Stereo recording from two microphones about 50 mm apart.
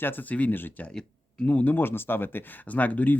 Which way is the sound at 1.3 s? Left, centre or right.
Left.